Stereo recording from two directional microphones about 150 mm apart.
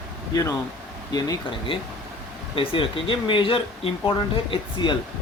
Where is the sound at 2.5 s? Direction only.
35° left (ahead or behind).